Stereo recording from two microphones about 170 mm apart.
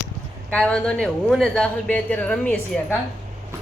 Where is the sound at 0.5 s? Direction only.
5° left (ahead or behind).